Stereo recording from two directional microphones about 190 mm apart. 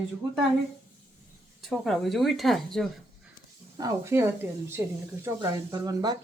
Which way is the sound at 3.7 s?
15° right (ahead or behind).